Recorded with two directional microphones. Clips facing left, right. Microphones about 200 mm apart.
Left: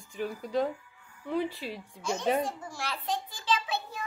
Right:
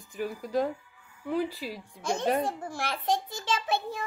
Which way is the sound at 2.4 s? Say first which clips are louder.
Right 4 dB; 55° right (ahead or behind).